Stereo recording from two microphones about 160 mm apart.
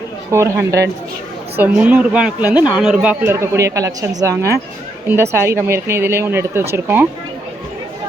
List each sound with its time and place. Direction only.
0.3 s a woman's voice: 15° right (ahead or behind)